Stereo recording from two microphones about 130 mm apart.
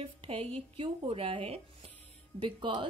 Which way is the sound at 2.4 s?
40° right (ahead or behind).